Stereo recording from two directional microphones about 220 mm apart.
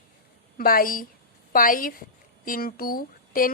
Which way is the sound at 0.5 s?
40° left (ahead or behind).